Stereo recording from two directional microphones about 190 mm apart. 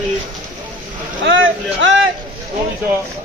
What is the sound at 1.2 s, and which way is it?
Speech, 85° right.